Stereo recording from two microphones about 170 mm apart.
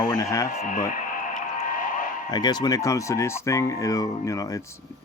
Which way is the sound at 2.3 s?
25° left (ahead or behind).